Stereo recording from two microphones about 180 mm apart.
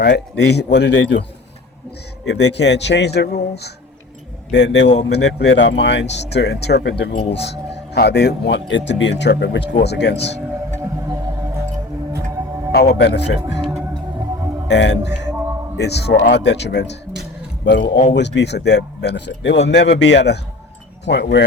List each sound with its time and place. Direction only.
0.0 s speech: 65° left (ahead or behind); by 1.2 s 90° left
2.2 s speech: 70° left (ahead or behind)
4.5 s speech: 75° left (ahead or behind)
5.1 s speech: 85° left
7.2 s speech: 35° left (ahead or behind)
7.4 s speech: 70° left (ahead or behind)
12.7 s speech: 65° left (ahead or behind)
14.7 s speech: 75° left (ahead or behind)